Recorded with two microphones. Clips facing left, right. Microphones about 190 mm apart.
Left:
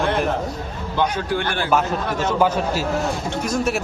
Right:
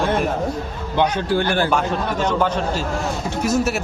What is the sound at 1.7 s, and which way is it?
Speech, 5° left (ahead or behind).